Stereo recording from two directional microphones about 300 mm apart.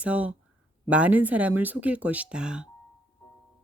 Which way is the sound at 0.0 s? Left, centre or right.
Centre.